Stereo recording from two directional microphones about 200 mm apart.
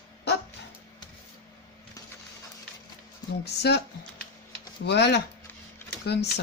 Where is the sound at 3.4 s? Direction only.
55° left (ahead or behind).